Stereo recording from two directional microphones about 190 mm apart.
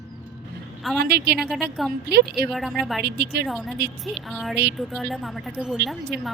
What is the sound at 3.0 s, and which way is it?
Speech, 60° right (ahead or behind).